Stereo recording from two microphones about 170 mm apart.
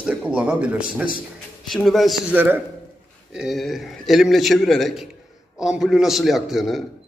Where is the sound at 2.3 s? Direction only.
10° right (ahead or behind).